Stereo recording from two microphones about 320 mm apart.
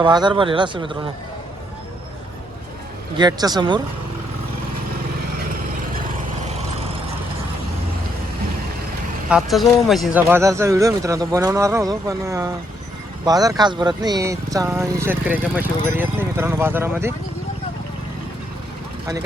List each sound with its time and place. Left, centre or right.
0.0 s speech: centre
3.2 s speech: centre
6.4 s vehicle: right
9.3 s speech: centre